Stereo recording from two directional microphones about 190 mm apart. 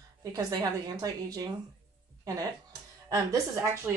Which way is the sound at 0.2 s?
20° right (ahead or behind).